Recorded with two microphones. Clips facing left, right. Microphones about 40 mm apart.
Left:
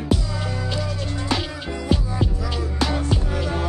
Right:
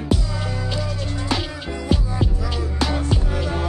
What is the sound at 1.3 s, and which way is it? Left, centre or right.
Music, centre.